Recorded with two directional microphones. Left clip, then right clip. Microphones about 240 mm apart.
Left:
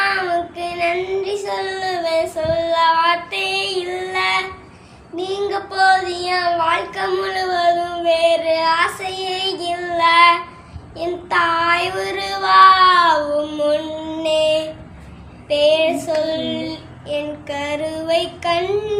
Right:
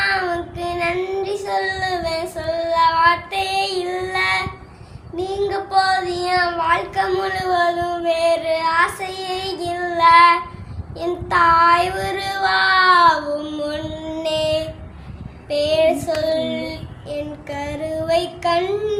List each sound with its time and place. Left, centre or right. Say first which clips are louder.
0.0 s child singing: left 2 dB; centre